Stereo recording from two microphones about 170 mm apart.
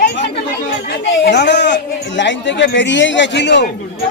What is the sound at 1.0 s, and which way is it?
A man's voice, 90° left.